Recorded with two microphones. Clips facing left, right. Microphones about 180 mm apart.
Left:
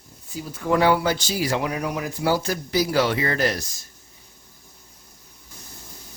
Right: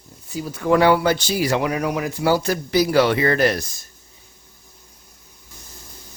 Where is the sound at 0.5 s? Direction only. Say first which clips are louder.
Right 3 dB; 75° right (ahead or behind); by 3.8 s 60° right (ahead or behind).